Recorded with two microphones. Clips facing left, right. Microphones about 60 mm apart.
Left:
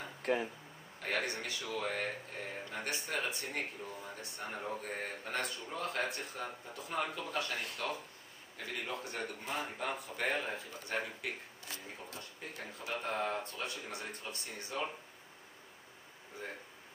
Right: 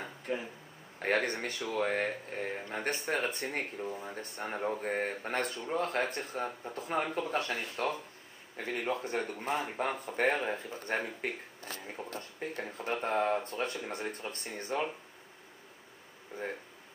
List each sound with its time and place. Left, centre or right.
0.9 s a man's voice: right
3.9 s a man's voice: right